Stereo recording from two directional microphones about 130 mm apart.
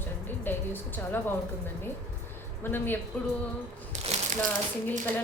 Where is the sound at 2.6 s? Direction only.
15° left (ahead or behind).